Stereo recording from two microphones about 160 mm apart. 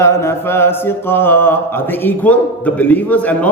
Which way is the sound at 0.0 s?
15° left (ahead or behind).